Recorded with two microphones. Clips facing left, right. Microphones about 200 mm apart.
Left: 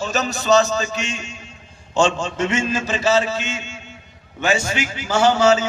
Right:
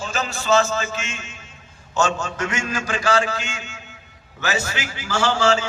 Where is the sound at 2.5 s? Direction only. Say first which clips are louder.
Left 6 dB; 25° left (ahead or behind).